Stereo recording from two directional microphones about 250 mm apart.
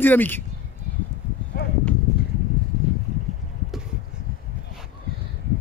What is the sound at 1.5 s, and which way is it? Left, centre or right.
Horse, left.